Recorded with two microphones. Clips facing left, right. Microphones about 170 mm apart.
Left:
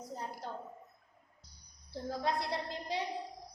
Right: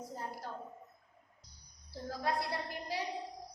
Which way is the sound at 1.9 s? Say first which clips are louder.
Left 1 dB; 20° left (ahead or behind).